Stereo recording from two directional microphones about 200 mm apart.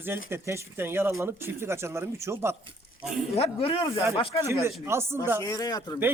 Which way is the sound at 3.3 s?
30° left (ahead or behind).